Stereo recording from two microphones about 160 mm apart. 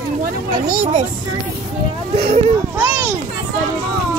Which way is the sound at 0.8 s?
45° right (ahead or behind).